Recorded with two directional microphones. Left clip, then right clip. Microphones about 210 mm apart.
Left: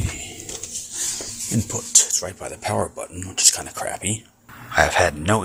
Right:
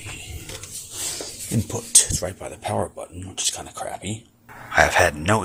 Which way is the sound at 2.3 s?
Centre (ahead or behind).